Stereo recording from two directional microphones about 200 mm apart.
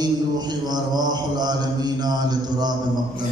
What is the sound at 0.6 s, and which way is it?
Mantra, 20° right (ahead or behind).